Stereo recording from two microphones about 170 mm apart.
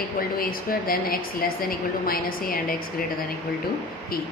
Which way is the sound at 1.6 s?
60° left (ahead or behind).